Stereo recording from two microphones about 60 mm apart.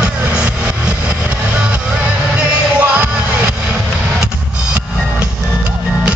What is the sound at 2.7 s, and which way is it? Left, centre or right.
Music, right.